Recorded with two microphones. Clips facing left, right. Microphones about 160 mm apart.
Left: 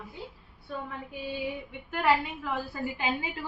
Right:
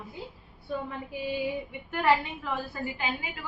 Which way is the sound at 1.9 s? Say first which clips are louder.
Right 1 dB; 5° left (ahead or behind).